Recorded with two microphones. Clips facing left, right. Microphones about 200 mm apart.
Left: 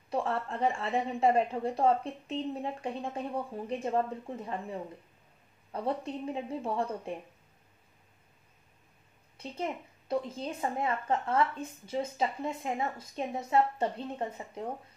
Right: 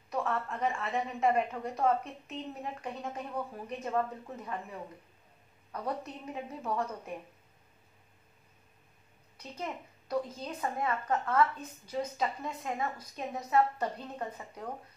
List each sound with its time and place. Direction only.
0.1 s a woman's voice: 30° left (ahead or behind)
9.4 s a woman's voice: 25° left (ahead or behind)